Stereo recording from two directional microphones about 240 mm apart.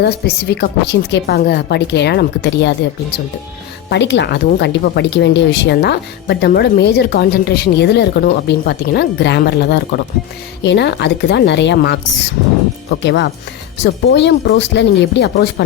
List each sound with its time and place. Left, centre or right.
0.0 s speech: left
3.8 s speech: left
13.0 s speech: left